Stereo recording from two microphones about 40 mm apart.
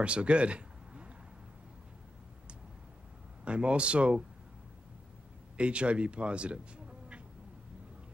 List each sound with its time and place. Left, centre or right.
0.0 s a sound: right
3.4 s speech: right
5.6 s speech: right